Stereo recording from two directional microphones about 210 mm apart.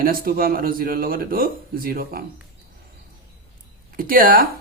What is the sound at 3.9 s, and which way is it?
Speech, 45° right (ahead or behind).